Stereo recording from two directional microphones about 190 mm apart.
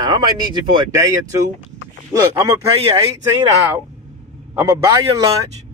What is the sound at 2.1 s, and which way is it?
Speech, 15° right (ahead or behind).